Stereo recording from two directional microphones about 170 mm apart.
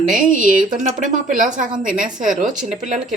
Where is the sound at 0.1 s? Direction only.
50° right (ahead or behind).